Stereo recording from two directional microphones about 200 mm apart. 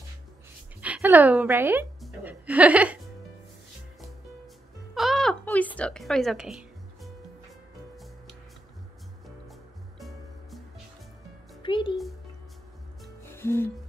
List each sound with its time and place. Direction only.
0.7 s speech: 10° right (ahead or behind)
4.9 s a sound: centre (ahead or behind)
9.9 s music: centre (ahead or behind)
11.6 s a child's voice: 25° left (ahead or behind)
13.3 s music: 10° left (ahead or behind)